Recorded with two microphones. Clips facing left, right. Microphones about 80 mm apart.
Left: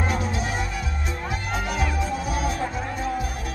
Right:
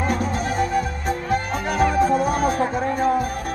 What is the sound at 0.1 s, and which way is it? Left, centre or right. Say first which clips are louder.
Music: right 4 dB; right.